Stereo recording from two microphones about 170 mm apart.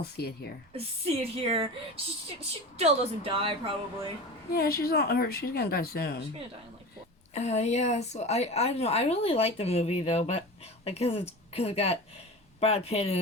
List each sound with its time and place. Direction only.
0.0 s speech: 70° left (ahead or behind)
1.0 s a woman's voice: 35° right (ahead or behind)
2.7 s a woman's voice: 35° right (ahead or behind)
4.5 s speech: 65° left (ahead or behind)
7.3 s a woman's voice: 40° left (ahead or behind)